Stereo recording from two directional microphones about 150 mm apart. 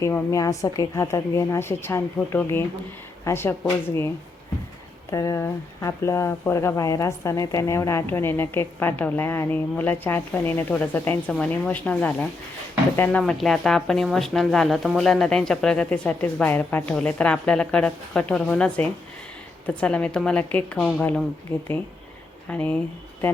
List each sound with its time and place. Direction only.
0.0 s a woman's voice: 20° left (ahead or behind)
5.1 s speech: 20° left (ahead or behind)